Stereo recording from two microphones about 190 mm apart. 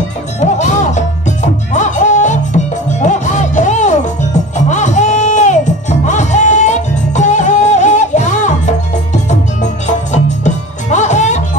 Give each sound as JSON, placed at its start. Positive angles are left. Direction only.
{"t": 0.4, "sound": "music", "side_deg": 40}